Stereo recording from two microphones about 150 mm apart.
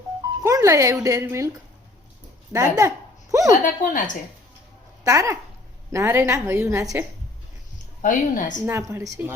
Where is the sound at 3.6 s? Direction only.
60° left (ahead or behind).